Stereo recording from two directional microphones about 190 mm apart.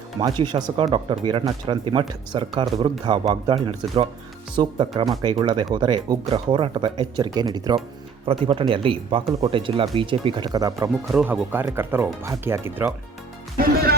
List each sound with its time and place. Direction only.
0.2 s speech: 25° right (ahead or behind)
11.1 s speech: 5° right (ahead or behind)